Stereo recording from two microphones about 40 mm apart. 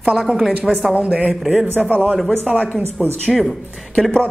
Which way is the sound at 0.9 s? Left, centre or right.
Right.